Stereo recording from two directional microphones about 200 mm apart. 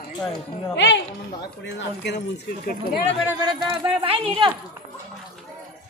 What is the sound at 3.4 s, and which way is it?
Speech, 25° right (ahead or behind).